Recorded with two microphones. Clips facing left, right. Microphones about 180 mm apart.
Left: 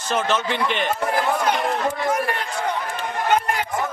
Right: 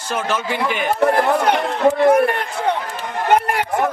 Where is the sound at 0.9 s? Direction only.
60° right (ahead or behind).